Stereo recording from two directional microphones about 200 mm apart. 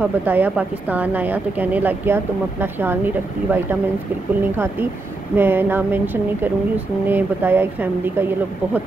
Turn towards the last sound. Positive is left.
turn(degrees=-10)  # may be behind; listen again after turning